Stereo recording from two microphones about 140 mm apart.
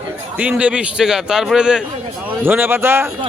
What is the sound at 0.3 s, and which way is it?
A man's voice, 10° right (ahead or behind).